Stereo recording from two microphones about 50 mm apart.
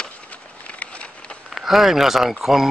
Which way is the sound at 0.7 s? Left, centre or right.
Left.